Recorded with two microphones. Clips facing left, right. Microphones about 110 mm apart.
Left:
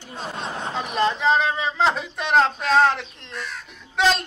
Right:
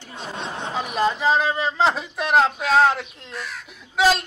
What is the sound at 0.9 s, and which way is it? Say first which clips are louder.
Speech: even; 5° right (ahead or behind).